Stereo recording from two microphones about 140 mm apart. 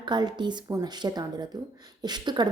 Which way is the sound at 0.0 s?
30° right (ahead or behind).